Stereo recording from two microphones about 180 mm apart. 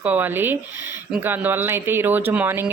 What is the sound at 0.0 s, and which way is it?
Speech, 10° right (ahead or behind).